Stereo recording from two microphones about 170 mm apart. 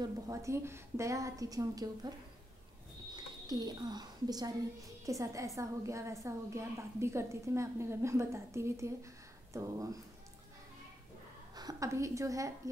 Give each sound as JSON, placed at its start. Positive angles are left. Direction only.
{"t": 0.0, "sound": "a woman's voice", "side_deg": -20}
{"t": 3.2, "sound": "a woman's voice", "side_deg": -25}
{"t": 11.5, "sound": "a woman's voice", "side_deg": -20}